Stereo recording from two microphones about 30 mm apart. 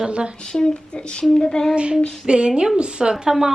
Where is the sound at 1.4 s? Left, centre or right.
Left.